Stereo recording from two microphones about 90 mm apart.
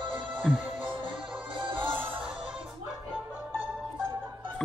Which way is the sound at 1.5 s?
70° right (ahead or behind).